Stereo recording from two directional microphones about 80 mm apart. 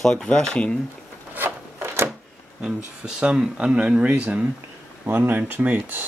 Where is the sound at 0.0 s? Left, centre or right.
Centre.